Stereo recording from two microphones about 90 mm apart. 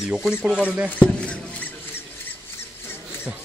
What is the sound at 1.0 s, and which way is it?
Rodents, 10° left (ahead or behind).